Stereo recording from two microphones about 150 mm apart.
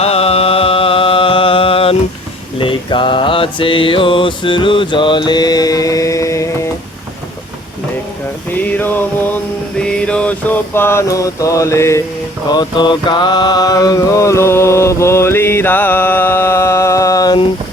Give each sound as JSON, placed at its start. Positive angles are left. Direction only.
{"t": 0.0, "sound": "music", "side_deg": 40}
{"t": 2.6, "sound": "mantra", "side_deg": 35}
{"t": 8.5, "sound": "a sound", "side_deg": 10}
{"t": 9.8, "sound": "mantra", "side_deg": 5}
{"t": 12.5, "sound": "mantra", "side_deg": 30}